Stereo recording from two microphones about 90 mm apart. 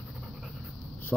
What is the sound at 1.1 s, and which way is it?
Speech, 5° left (ahead or behind).